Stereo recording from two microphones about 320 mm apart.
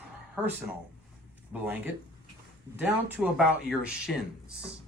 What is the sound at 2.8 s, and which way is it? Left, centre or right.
Speech, centre.